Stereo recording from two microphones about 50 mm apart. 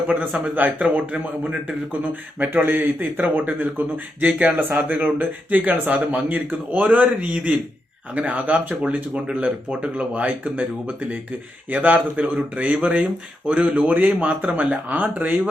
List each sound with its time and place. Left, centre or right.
0.1 s a man's voice: right
2.5 s speech: right
4.3 s a man's voice: right
4.9 s a man's voice: right